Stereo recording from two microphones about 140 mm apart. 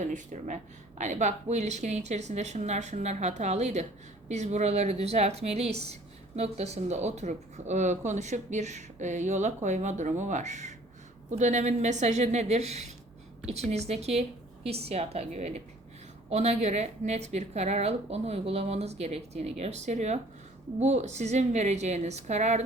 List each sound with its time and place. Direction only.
0.0 s a woman's voice: 65° right (ahead or behind)